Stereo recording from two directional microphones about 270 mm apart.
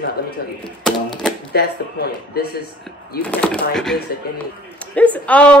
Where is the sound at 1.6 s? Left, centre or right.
Left.